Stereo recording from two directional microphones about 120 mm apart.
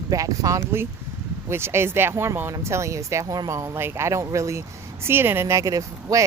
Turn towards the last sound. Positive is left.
turn(degrees=-30)  # may be behind; listen again after turning